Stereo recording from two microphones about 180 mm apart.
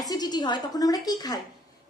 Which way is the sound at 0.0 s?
20° left (ahead or behind).